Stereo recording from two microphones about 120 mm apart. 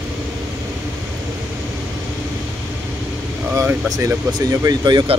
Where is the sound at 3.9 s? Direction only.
25° right (ahead or behind).